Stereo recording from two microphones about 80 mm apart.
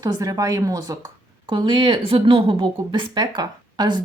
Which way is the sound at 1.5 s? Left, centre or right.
Right.